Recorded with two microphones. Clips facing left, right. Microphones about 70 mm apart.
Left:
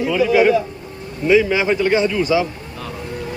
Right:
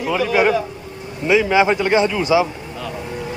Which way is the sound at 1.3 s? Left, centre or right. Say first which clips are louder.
Even; centre.